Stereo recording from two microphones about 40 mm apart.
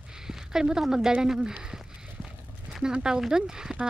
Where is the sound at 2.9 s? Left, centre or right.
Centre.